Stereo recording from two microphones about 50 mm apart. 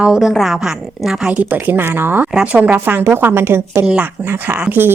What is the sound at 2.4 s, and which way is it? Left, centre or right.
Speech, right.